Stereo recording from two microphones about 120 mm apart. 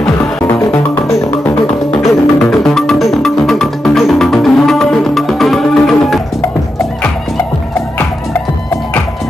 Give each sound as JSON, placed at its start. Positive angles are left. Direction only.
{"t": 0.2, "sound": "music", "side_deg": 20}